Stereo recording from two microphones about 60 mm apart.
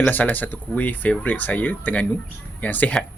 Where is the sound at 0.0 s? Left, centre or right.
Left.